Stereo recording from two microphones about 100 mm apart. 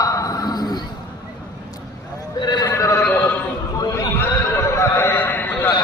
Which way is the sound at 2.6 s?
30° left (ahead or behind).